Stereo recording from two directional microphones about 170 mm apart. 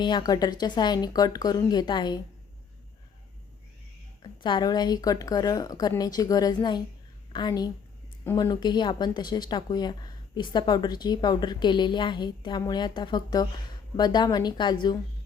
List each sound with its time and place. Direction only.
0.0 s speech: 25° left (ahead or behind)
4.2 s speech: 25° left (ahead or behind)